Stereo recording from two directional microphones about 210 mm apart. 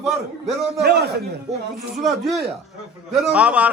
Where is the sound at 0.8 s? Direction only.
50° right (ahead or behind).